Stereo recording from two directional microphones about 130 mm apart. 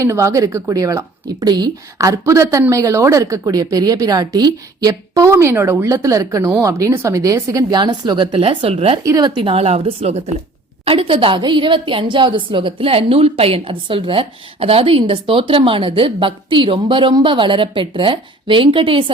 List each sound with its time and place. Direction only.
0.0 s a woman's voice: 20° right (ahead or behind); by 9.0 s 50° right (ahead or behind)
9.0 s a woman's voice: 30° right (ahead or behind)